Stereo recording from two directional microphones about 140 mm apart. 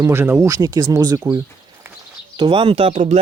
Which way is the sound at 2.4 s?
35° right (ahead or behind).